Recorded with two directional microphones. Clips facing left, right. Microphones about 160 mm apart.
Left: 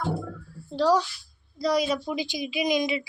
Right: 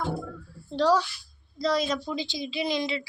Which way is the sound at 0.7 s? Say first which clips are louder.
Left 1 dB; 10° left (ahead or behind).